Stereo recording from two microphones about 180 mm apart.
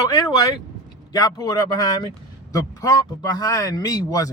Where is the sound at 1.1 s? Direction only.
20° left (ahead or behind).